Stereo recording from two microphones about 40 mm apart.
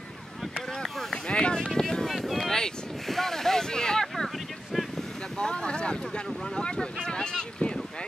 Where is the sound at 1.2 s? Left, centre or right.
Left.